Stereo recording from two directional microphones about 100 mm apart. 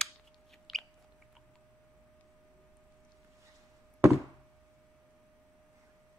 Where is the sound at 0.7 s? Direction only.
Centre (ahead or behind).